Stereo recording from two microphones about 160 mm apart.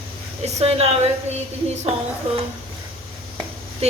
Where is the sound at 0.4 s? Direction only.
40° right (ahead or behind).